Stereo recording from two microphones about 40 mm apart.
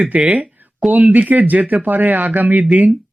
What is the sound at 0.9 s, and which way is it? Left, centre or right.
Speech, right.